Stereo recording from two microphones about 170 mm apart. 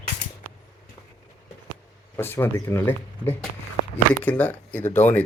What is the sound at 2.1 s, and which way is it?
Speech, 10° left (ahead or behind).